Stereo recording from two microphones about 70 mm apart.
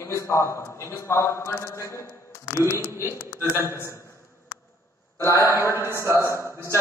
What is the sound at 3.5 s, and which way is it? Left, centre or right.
Speech, left.